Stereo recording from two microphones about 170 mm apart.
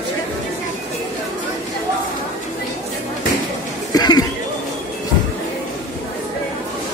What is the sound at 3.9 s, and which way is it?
Chatter, 25° left (ahead or behind).